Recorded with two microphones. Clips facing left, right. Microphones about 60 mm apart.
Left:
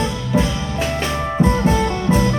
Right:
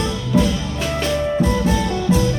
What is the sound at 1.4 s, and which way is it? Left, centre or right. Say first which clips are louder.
Music: left 2 dB; left.